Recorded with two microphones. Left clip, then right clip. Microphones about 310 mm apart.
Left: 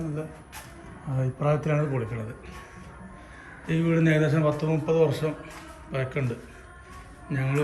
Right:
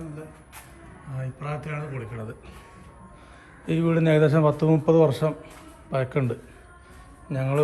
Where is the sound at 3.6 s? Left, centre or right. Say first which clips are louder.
Right 2 dB; centre.